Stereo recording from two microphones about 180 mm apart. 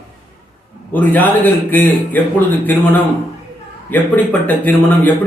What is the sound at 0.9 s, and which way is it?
A man's voice, 10° left (ahead or behind).